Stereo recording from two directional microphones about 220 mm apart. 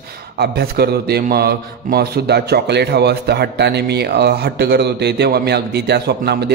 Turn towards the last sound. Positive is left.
turn(degrees=-50)  # may be behind; listen again after turning